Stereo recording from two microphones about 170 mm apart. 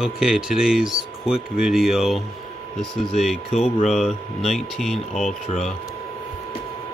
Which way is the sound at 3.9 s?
Centre (ahead or behind).